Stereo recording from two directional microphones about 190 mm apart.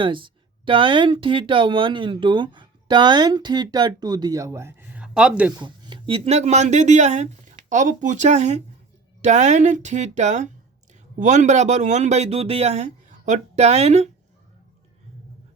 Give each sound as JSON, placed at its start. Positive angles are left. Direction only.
{"t": 0.0, "sound": "speech", "side_deg": -25}
{"t": 5.5, "sound": "speech", "side_deg": -25}